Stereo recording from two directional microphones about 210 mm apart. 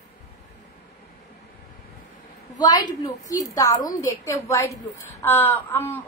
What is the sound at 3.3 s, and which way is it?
A woman's voice, 15° left (ahead or behind).